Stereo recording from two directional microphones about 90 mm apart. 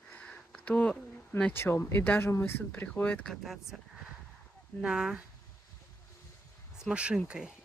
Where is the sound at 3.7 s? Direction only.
5° left (ahead or behind).